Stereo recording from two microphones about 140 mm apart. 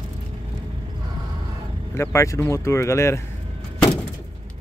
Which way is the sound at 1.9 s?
20° left (ahead or behind).